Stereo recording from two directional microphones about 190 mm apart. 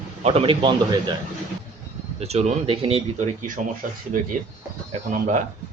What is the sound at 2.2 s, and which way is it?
Speech, 35° right (ahead or behind).